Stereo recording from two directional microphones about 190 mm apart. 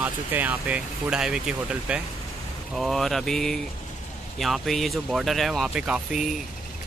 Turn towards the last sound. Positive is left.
turn(degrees=-5)  # may be behind; listen again after turning